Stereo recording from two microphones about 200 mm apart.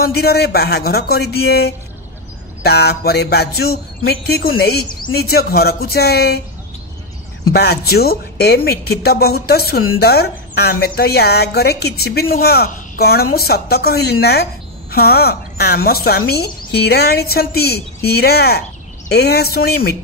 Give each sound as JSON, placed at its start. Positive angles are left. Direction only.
{"t": 0.0, "sound": "a woman's voice", "side_deg": 50}
{"t": 7.5, "sound": "a woman's voice", "side_deg": 50}